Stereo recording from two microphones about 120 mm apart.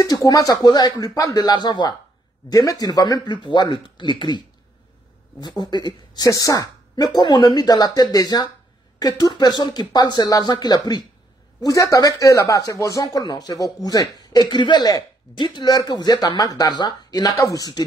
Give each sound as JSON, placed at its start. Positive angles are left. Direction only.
{"t": 0.0, "sound": "speech", "side_deg": 30}